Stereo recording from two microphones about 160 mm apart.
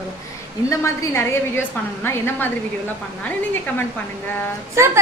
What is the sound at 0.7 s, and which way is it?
A woman's voice, 20° left (ahead or behind).